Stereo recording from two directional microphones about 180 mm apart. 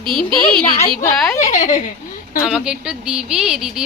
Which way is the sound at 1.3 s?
40° left (ahead or behind).